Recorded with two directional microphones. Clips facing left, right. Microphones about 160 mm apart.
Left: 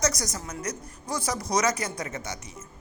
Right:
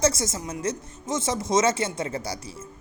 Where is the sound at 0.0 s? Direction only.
25° right (ahead or behind).